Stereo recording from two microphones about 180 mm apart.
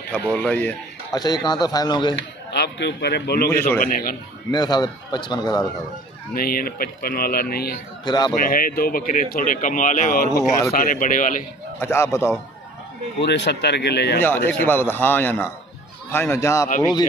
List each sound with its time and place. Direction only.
0.3 s a man's voice: 5° left (ahead or behind)
1.1 s a man's voice: 20° left (ahead or behind)
2.1 s a man's voice: 70° left (ahead or behind)
3.4 s a man's voice: 15° left (ahead or behind)
3.8 s speech: 50° left (ahead or behind)
4.5 s a man's voice: 20° left (ahead or behind)
6.3 s speech: 55° left (ahead or behind)
8.0 s speech: 25° left (ahead or behind)
8.4 s speech: 55° left (ahead or behind)
11.8 s a man's voice: 15° left (ahead or behind)
13.2 s speech: 70° left (ahead or behind)
14.2 s a man's voice: 10° left (ahead or behind)